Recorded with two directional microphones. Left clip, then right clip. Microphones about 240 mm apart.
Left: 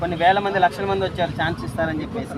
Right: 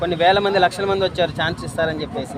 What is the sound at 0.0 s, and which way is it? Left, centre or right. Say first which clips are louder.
Speech: right 2 dB; right.